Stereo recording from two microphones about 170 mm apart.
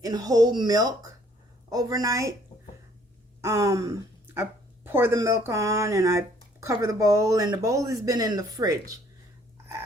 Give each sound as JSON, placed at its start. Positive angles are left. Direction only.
{"t": 0.0, "sound": "speech", "side_deg": -20}
{"t": 3.4, "sound": "a sound", "side_deg": -15}
{"t": 4.4, "sound": "speech", "side_deg": -10}